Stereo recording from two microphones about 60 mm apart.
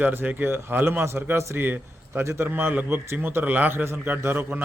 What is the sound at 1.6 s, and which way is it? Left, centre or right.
Speech, right.